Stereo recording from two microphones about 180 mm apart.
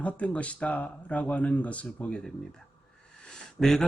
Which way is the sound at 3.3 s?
Centre (ahead or behind).